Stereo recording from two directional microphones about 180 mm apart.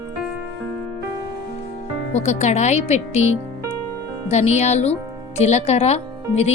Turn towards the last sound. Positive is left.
turn(degrees=35)  # may be behind; listen again after turning